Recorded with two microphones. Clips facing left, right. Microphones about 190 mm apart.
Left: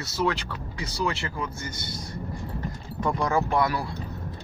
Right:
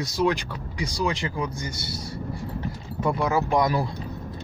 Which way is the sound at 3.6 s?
20° right (ahead or behind).